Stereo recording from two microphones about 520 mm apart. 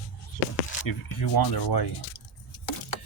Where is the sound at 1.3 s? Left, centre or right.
Left.